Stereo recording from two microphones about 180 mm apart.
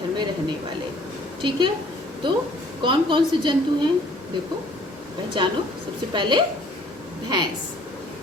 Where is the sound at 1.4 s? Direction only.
25° right (ahead or behind).